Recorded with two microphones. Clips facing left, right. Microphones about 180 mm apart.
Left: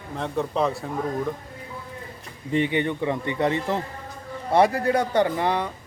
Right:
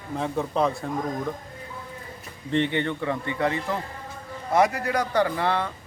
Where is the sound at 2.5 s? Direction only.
10° left (ahead or behind).